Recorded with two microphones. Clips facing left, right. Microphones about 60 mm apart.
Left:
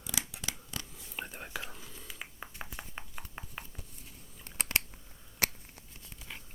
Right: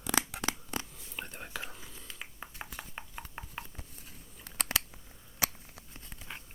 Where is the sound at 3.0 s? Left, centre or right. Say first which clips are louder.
Right 1 dB; centre.